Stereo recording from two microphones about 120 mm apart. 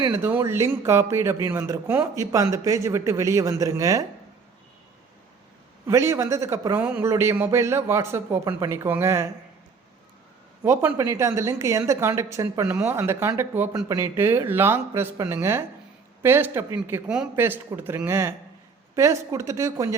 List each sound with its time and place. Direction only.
0.1 s speech: 15° right (ahead or behind)
5.8 s speech: 25° right (ahead or behind)
10.6 s a man's voice: 20° right (ahead or behind)